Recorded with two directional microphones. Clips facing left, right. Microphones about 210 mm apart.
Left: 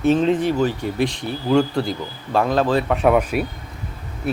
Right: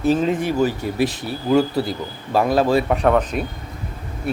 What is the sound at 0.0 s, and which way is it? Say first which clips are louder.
Speech: left 2 dB; 5° right (ahead or behind).